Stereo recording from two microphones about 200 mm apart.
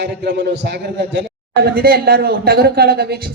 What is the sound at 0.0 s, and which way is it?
A man's voice, 55° right (ahead or behind).